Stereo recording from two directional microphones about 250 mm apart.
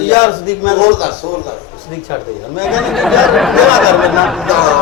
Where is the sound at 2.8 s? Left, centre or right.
Centre.